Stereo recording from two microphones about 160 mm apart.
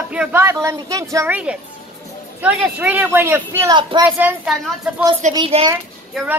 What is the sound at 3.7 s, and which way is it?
Speech, 30° right (ahead or behind).